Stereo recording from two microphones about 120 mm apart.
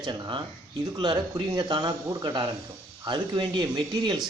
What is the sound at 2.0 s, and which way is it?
Speech, 25° right (ahead or behind).